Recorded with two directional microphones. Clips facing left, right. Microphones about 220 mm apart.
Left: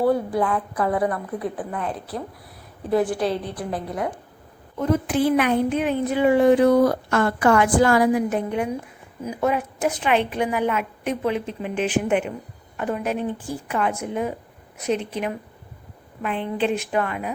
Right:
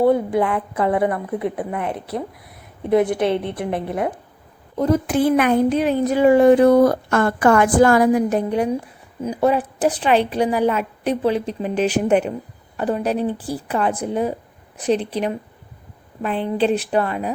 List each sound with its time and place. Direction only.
0.0 s a woman's voice: 20° right (ahead or behind)
4.8 s a woman's voice: 40° right (ahead or behind)